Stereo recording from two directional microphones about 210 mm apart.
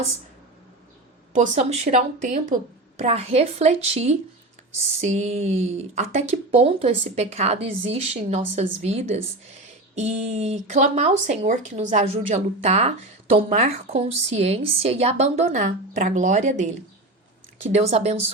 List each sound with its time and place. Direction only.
1.3 s speech: 35° right (ahead or behind)